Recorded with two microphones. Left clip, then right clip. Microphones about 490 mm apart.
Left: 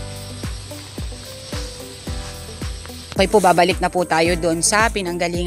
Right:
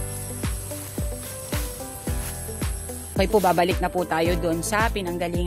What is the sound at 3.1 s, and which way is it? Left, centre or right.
Speech, right.